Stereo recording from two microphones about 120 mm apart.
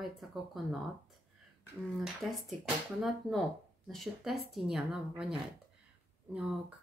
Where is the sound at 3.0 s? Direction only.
Centre (ahead or behind).